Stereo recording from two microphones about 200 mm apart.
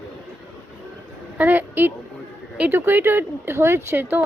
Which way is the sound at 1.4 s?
10° right (ahead or behind).